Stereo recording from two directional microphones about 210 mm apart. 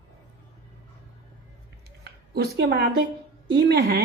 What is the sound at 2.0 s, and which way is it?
A woman's voice, 50° right (ahead or behind).